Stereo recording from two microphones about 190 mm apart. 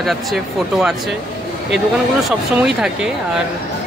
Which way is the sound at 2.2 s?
5° right (ahead or behind).